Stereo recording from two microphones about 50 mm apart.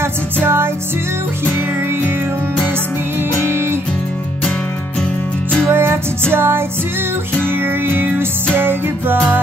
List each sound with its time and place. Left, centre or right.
0.4 s music: right
5.7 s music: right